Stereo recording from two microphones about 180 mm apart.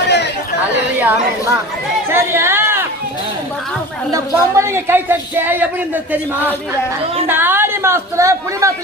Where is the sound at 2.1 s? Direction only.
15° right (ahead or behind).